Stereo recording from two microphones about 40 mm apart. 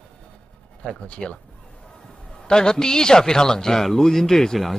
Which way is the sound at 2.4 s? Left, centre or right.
Centre.